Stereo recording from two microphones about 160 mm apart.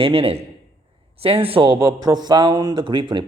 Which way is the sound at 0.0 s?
35° right (ahead or behind).